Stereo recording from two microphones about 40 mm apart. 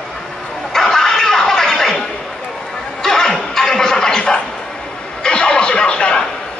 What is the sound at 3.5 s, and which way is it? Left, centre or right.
Music, centre.